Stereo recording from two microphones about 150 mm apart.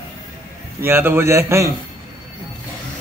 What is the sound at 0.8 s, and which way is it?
Speech, 15° right (ahead or behind).